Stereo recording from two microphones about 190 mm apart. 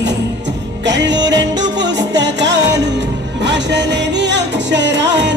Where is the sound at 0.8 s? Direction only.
70° right (ahead or behind).